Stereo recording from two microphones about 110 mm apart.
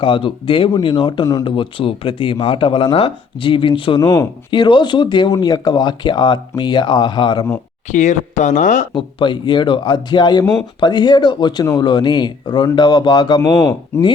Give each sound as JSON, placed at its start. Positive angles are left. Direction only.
{"t": 0.0, "sound": "speech", "side_deg": 50}
{"t": 1.5, "sound": "speech", "side_deg": 50}
{"t": 4.0, "sound": "speech", "side_deg": 30}
{"t": 4.5, "sound": "speech", "side_deg": 45}
{"t": 7.9, "sound": "speech", "side_deg": 90}
{"t": 9.0, "sound": "speech", "side_deg": 50}
{"t": 13.9, "sound": "speech", "side_deg": 25}